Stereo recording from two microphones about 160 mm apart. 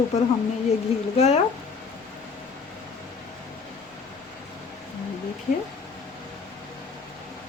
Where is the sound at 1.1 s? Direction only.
45° left (ahead or behind).